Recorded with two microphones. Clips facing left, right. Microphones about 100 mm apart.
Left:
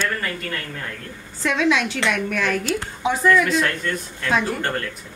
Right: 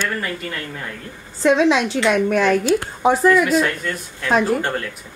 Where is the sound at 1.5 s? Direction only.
30° right (ahead or behind).